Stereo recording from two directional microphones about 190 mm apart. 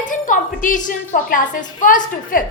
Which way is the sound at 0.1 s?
45° left (ahead or behind).